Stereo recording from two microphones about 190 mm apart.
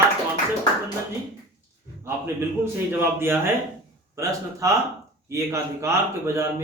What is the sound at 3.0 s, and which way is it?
Speech, 10° right (ahead or behind).